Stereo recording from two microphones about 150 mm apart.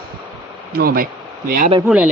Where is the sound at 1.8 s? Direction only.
10° right (ahead or behind).